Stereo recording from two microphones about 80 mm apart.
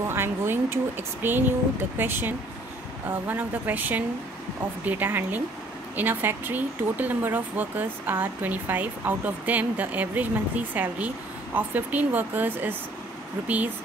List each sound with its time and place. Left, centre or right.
0.0 s speech: right